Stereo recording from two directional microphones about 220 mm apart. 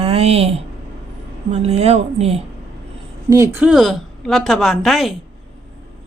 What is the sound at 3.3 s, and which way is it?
A woman's voice, 10° right (ahead or behind).